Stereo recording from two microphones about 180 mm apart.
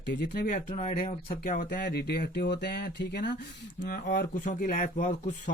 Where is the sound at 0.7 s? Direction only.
40° left (ahead or behind).